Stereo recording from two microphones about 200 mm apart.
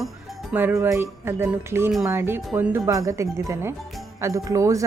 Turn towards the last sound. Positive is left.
turn(degrees=-15)  # may be behind; listen again after turning